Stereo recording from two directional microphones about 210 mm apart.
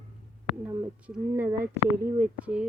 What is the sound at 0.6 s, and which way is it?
Speech, 10° right (ahead or behind).